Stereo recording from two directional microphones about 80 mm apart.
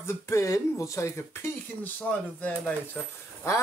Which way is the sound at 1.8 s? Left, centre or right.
Centre.